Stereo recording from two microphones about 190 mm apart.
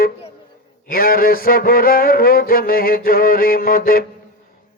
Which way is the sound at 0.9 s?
50° left (ahead or behind).